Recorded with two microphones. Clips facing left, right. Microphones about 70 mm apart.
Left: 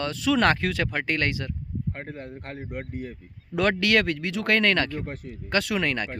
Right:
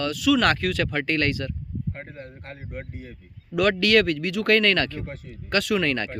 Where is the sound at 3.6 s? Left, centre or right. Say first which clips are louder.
Right 3 dB; left.